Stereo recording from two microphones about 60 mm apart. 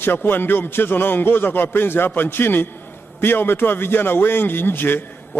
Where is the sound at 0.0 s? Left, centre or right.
Left.